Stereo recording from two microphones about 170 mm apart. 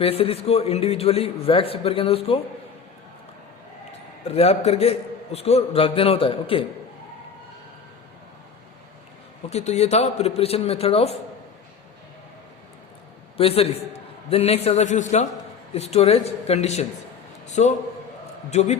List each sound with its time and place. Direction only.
0.0 s a man's voice: 35° left (ahead or behind)
4.4 s a man's voice: 35° left (ahead or behind)
9.5 s a man's voice: 40° left (ahead or behind)
13.3 s a man's voice: 35° left (ahead or behind)